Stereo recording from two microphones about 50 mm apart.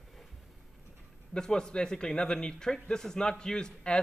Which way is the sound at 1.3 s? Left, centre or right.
Centre.